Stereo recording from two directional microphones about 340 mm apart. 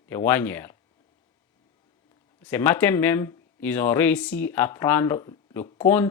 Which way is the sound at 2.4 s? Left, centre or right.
Centre.